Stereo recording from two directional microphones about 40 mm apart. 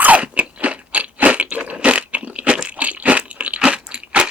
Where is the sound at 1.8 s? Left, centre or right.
Right.